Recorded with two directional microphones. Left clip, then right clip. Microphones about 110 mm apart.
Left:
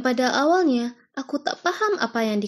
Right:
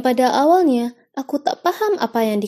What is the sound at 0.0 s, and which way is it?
A woman's voice, 35° right (ahead or behind).